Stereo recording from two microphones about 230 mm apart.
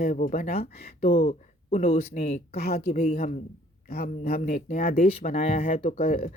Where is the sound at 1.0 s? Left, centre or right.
Left.